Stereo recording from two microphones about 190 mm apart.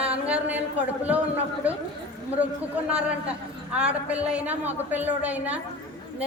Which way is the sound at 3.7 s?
5° right (ahead or behind).